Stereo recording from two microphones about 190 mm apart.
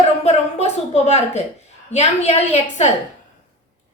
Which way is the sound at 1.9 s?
35° left (ahead or behind).